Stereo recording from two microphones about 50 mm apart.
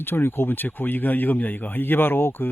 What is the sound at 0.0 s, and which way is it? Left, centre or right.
Speech, left.